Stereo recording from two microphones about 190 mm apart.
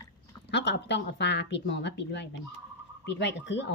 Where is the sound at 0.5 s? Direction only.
65° left (ahead or behind).